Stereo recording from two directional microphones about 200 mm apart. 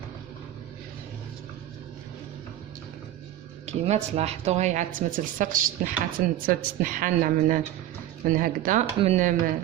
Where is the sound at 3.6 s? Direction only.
35° right (ahead or behind).